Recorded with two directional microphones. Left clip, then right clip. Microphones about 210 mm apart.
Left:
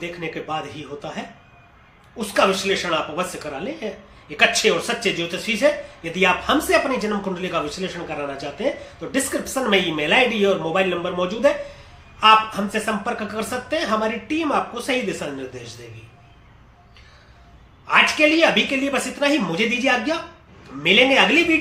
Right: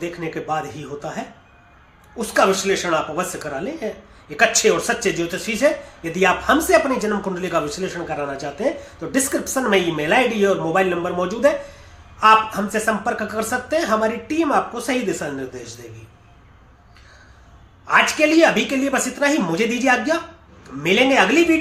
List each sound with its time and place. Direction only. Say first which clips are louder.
0.2 s speech: right 3 dB; 15° right (ahead or behind)
17.8 s speech: even; 15° right (ahead or behind)